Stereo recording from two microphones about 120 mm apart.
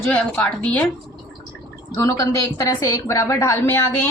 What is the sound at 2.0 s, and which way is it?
Speech, 30° left (ahead or behind).